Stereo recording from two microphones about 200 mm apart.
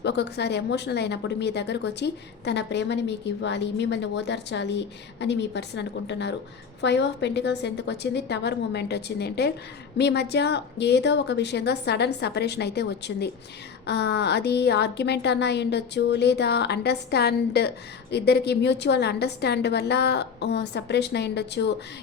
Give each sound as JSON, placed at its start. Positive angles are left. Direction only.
{"t": 0.0, "sound": "speech", "side_deg": 60}